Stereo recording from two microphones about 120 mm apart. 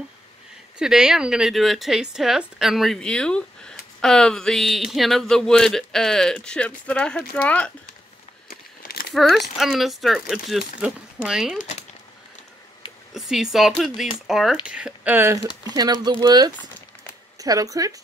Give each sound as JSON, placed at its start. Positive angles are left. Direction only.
{"t": 0.7, "sound": "speech", "side_deg": -5}
{"t": 9.1, "sound": "speech", "side_deg": 0}
{"t": 11.5, "sound": "speech", "side_deg": 65}
{"t": 13.1, "sound": "speech", "side_deg": -5}
{"t": 15.6, "sound": "speech", "side_deg": -35}